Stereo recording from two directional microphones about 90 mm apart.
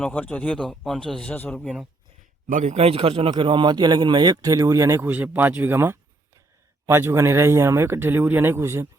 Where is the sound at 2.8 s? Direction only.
90° right; by 5.0 s 35° right (ahead or behind).